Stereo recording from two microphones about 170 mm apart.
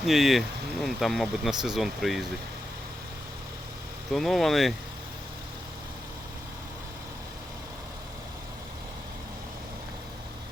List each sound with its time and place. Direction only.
0.0 s speech: centre (ahead or behind)
4.1 s speech: centre (ahead or behind)